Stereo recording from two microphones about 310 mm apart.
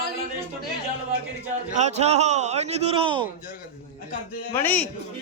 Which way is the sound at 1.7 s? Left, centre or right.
Right.